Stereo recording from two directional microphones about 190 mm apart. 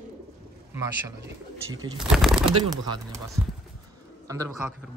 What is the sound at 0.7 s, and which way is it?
Speech, 15° right (ahead or behind).